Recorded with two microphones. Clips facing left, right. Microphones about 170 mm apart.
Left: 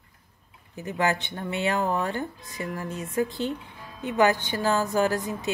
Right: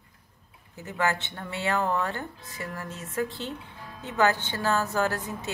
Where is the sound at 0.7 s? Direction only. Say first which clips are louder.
Left 2 dB; 15° left (ahead or behind).